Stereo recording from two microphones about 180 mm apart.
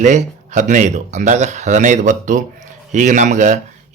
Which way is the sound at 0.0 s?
40° right (ahead or behind).